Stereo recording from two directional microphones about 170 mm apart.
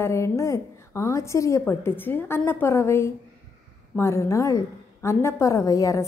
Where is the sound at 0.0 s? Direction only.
15° left (ahead or behind).